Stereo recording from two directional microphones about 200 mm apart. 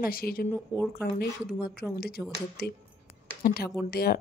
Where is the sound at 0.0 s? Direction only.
45° left (ahead or behind).